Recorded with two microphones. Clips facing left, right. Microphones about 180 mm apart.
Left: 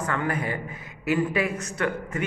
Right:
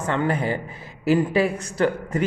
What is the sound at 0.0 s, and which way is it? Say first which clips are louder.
A man's voice: right 4 dB; 30° right (ahead or behind).